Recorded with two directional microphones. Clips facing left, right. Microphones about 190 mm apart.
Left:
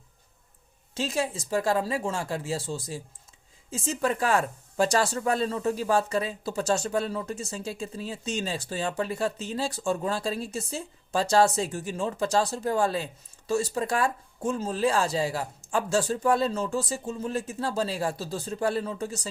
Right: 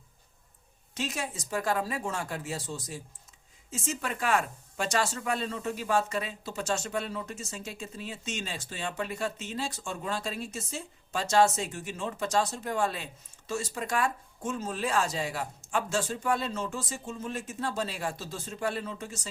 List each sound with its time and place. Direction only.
0.9 s speech: 30° left (ahead or behind)